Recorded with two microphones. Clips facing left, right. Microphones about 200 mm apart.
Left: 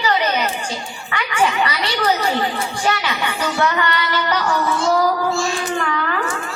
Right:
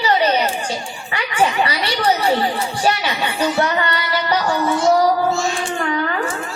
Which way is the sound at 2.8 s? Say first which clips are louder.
Right 1 dB; 30° right (ahead or behind).